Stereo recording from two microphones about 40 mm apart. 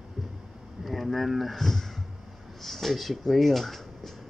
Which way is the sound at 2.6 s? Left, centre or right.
Centre.